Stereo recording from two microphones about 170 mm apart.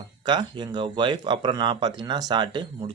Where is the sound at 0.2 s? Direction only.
25° right (ahead or behind).